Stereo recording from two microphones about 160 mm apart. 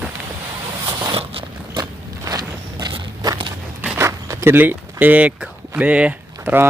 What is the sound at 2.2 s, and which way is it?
Walk, 25° right (ahead or behind).